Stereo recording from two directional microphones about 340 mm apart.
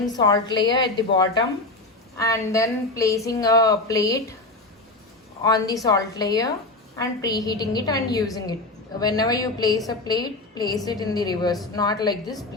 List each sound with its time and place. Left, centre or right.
0.0 s a woman's voice: centre
5.4 s a woman's voice: centre